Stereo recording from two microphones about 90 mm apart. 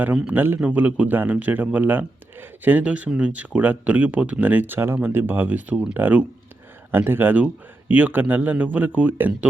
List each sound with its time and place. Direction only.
0.3 s a man's voice: 20° right (ahead or behind)